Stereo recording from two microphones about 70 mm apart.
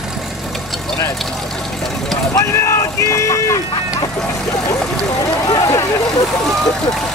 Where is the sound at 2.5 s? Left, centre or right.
Left.